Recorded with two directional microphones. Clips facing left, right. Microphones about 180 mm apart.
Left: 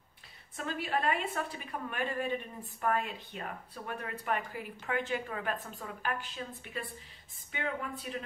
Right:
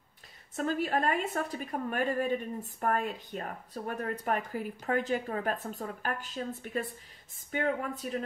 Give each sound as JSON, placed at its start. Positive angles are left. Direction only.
{"t": 0.6, "sound": "a woman's voice", "side_deg": -45}